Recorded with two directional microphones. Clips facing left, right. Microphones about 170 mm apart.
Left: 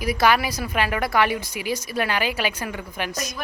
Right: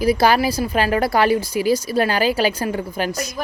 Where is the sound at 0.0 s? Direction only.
30° right (ahead or behind).